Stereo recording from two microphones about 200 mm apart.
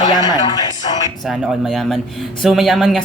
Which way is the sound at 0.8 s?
25° left (ahead or behind).